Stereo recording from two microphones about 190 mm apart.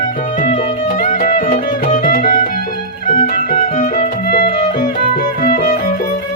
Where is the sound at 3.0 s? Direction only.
45° left (ahead or behind).